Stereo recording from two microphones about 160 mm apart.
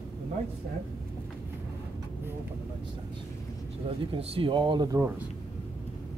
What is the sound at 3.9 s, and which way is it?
Speech, 35° right (ahead or behind).